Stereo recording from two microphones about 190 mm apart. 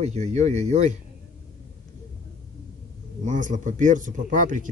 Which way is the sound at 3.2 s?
40° right (ahead or behind).